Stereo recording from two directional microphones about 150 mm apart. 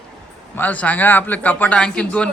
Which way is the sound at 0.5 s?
10° left (ahead or behind).